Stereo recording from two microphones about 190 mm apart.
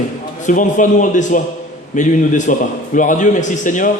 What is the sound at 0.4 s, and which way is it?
A man's voice, 40° left (ahead or behind).